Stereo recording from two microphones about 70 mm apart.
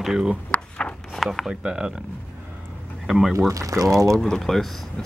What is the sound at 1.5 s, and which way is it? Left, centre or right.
Speech, centre.